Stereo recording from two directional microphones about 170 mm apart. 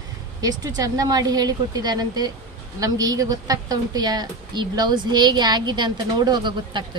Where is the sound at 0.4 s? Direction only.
20° right (ahead or behind).